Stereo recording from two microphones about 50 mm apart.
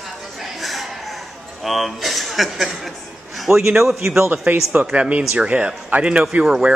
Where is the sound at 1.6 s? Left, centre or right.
Centre.